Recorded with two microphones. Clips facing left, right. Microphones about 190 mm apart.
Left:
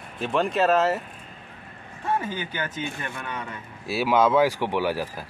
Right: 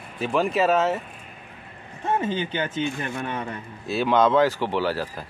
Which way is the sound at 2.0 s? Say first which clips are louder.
Right 3 dB; 20° right (ahead or behind).